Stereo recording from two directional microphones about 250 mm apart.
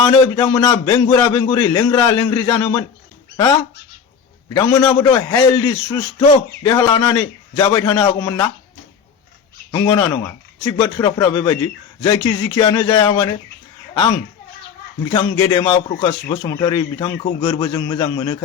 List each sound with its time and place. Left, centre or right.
0.0 s a man's voice: centre
4.4 s a man's voice: centre
9.7 s a man's voice: centre
15.1 s a man's voice: centre